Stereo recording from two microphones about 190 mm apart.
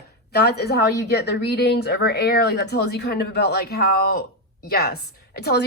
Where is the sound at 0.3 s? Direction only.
60° left (ahead or behind).